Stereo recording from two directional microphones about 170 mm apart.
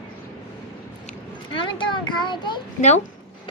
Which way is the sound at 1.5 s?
30° left (ahead or behind).